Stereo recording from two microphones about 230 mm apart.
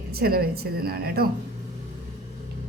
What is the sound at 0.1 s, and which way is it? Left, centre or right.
Speech, right.